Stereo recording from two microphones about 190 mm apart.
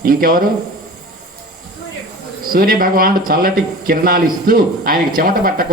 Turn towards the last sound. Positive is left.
turn(degrees=-50)  # may be behind; listen again after turning